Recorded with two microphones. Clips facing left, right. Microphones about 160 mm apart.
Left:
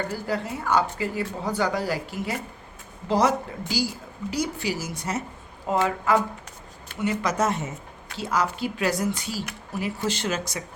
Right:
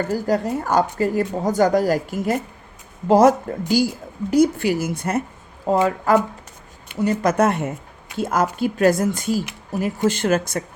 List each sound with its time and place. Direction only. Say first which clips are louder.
0.1 s speech: right 8 dB; 45° right (ahead or behind)
5.6 s speech: right 5 dB; 40° right (ahead or behind)